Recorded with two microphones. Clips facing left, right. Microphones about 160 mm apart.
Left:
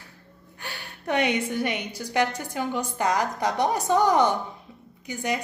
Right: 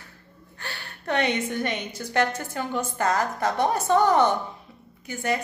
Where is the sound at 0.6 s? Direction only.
15° left (ahead or behind).